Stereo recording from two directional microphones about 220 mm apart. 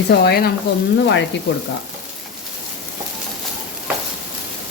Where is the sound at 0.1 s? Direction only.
45° left (ahead or behind).